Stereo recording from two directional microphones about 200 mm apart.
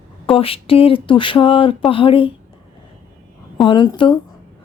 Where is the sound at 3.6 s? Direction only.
25° left (ahead or behind).